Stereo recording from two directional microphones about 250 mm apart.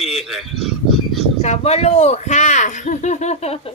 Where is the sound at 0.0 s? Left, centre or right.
Centre.